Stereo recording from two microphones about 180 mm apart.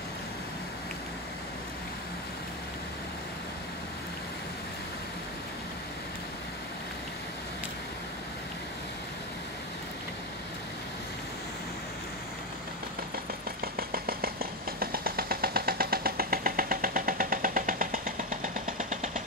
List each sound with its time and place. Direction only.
13.7 s engine: 55° right (ahead or behind)